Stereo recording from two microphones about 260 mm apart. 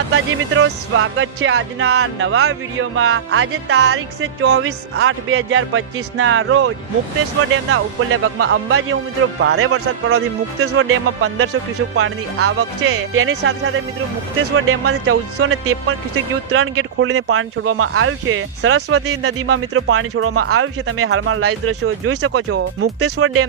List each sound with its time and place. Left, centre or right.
0.1 s music: right
14.5 s speech: right